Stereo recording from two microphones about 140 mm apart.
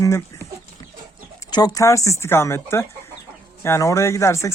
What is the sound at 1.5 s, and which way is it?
Speech, 25° left (ahead or behind).